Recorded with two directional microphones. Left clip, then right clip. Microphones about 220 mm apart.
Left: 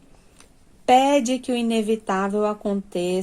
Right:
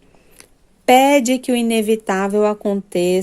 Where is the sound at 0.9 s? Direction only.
45° right (ahead or behind).